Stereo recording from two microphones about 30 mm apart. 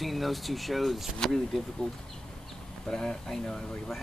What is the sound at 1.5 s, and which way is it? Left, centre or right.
Speech, centre.